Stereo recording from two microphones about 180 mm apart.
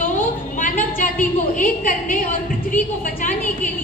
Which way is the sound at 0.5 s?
45° left (ahead or behind).